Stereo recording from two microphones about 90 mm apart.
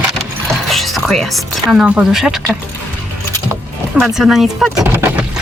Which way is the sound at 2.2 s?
Centre (ahead or behind).